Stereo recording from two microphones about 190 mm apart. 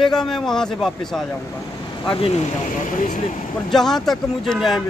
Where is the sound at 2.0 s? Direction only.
30° left (ahead or behind).